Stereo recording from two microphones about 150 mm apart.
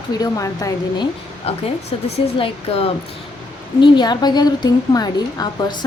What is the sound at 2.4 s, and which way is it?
Speech, 40° left (ahead or behind).